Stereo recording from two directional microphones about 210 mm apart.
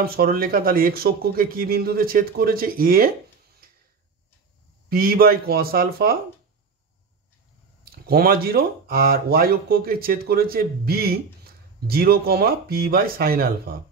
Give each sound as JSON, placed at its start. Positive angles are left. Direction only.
{"t": 0.0, "sound": "speech", "side_deg": -45}
{"t": 4.8, "sound": "speech", "side_deg": -45}
{"t": 7.8, "sound": "speech", "side_deg": -45}